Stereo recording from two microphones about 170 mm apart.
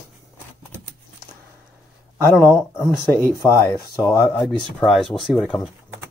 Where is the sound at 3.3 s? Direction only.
15° left (ahead or behind).